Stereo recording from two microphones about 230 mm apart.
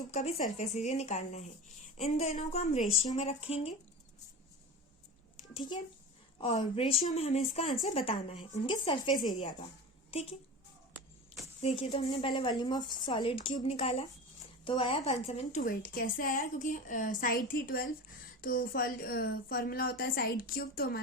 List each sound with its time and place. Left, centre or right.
0.1 s a woman's voice: left
5.5 s a woman's voice: centre
11.8 s a woman's voice: left